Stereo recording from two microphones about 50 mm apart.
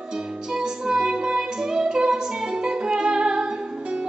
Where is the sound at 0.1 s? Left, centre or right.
Centre.